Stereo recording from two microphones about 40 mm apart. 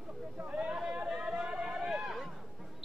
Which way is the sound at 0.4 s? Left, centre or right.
Right.